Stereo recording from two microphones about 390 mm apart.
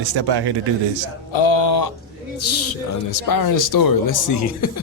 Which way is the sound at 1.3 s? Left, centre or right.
Left.